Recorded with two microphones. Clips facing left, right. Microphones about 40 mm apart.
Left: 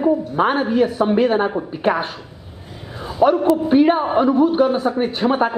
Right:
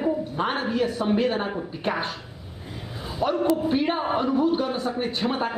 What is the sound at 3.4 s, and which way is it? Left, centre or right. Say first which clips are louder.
A man's voice: left 8 dB; left.